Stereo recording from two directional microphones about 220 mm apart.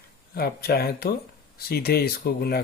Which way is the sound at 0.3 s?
45° left (ahead or behind).